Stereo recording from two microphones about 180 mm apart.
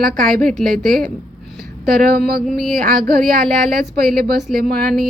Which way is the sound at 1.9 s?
55° right (ahead or behind).